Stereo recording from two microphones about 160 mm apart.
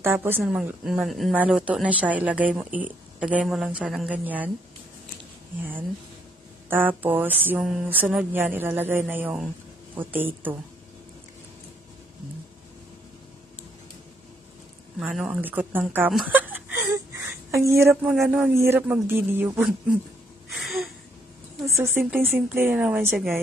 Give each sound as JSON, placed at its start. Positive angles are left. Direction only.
{"t": 0.0, "sound": "a woman's voice", "side_deg": -15}
{"t": 6.7, "sound": "a woman's voice", "side_deg": -10}
{"t": 15.0, "sound": "a woman's voice", "side_deg": -5}
{"t": 18.1, "sound": "a woman's voice", "side_deg": -5}
{"t": 20.4, "sound": "a sound", "side_deg": 0}
{"t": 21.6, "sound": "a woman's voice", "side_deg": -15}